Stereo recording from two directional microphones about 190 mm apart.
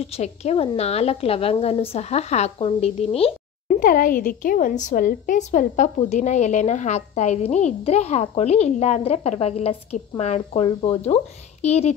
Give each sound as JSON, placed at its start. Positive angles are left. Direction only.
{"t": 0.0, "sound": "a woman's voice", "side_deg": 35}
{"t": 3.6, "sound": "a woman's voice", "side_deg": 45}